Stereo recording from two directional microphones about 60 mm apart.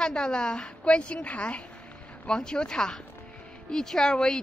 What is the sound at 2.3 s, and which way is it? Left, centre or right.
A woman's voice, centre.